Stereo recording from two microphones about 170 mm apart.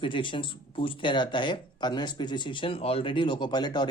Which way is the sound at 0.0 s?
30° left (ahead or behind).